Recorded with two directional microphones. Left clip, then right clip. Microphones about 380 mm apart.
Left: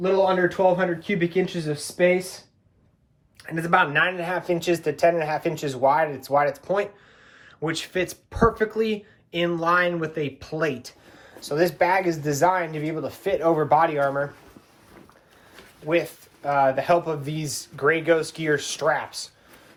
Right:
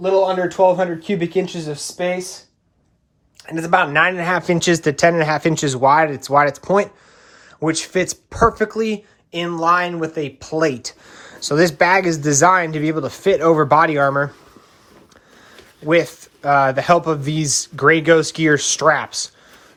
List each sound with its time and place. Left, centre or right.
0.0 s speech: centre
3.4 s speech: centre
15.9 s speech: right